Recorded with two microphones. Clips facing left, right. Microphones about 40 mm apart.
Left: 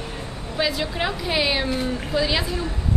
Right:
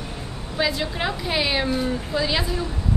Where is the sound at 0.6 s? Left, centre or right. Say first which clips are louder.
Even; centre.